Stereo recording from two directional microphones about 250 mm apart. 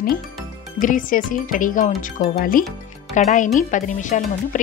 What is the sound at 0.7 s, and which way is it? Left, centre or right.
Speech, left.